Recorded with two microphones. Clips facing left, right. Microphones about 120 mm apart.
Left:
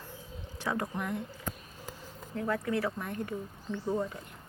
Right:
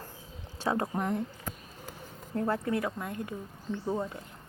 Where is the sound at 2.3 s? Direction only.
35° right (ahead or behind).